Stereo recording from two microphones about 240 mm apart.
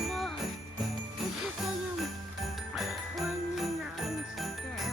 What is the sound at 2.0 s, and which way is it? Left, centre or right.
Jingle bell, centre.